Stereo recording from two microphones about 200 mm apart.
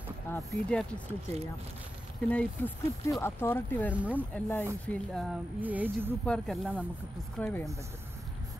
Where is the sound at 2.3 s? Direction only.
10° left (ahead or behind).